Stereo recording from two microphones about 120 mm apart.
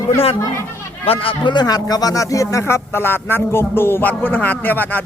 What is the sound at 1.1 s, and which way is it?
Speech, 50° left (ahead or behind).